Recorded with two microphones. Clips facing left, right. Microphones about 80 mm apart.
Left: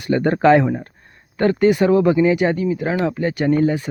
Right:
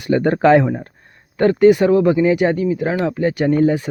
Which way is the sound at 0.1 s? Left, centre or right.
Centre.